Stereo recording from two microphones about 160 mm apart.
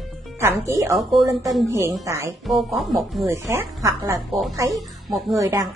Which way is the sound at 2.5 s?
Centre (ahead or behind).